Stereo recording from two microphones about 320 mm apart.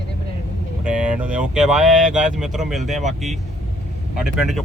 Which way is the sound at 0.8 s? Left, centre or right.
Centre.